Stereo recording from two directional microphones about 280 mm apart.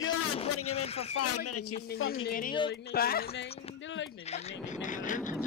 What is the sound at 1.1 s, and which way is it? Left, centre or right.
Speech, left.